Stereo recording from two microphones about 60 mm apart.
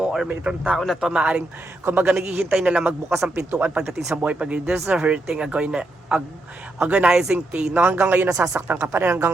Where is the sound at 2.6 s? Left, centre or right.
Centre.